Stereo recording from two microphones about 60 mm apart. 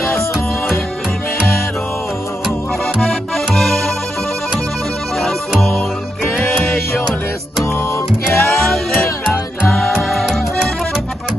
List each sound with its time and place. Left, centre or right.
3.0 s music: centre
8.4 s music: centre